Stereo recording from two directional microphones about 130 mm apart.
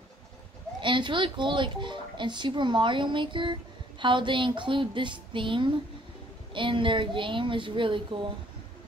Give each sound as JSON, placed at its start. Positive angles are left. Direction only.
{"t": 0.7, "sound": "speech", "side_deg": -40}